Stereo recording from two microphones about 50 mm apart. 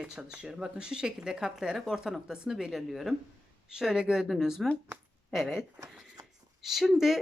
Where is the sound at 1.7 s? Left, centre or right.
Centre.